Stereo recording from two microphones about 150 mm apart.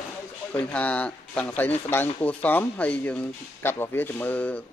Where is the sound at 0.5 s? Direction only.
10° left (ahead or behind).